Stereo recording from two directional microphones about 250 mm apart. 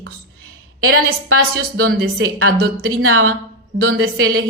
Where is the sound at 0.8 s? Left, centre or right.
Right.